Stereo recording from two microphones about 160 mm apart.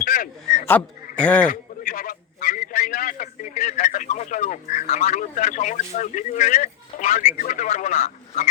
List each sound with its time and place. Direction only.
0.0 s a sound: 60° left (ahead or behind)
0.7 s speech: 10° left (ahead or behind)
1.5 s a man's voice: 60° left (ahead or behind)